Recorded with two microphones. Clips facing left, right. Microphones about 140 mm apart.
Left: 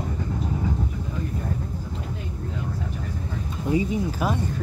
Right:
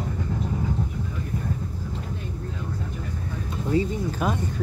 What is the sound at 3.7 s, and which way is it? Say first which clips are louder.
Speech: left 1 dB; 10° left (ahead or behind).